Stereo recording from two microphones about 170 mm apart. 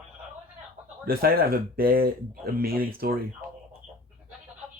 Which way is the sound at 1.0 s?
60° right (ahead or behind).